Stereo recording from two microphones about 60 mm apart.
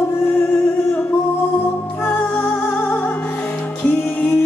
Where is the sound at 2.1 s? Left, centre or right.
Left.